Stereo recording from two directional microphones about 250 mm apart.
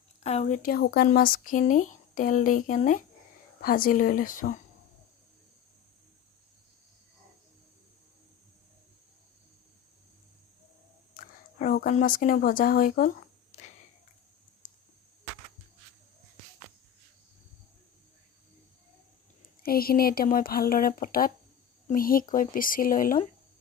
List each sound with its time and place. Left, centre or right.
0.2 s speech: left
11.1 s a sound: left
19.6 s speech: left